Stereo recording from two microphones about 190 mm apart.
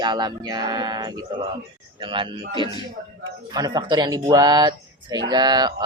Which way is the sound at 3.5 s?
20° right (ahead or behind).